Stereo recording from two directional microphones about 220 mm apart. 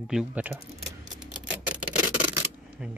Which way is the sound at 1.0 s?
5° right (ahead or behind).